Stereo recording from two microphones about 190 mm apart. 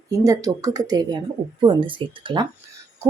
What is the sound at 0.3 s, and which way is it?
Speech, 20° right (ahead or behind).